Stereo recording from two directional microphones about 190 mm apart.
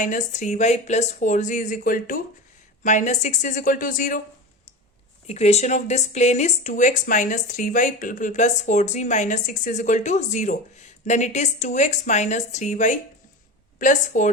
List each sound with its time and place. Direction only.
0.0 s speech: 40° left (ahead or behind)
5.3 s speech: 35° left (ahead or behind)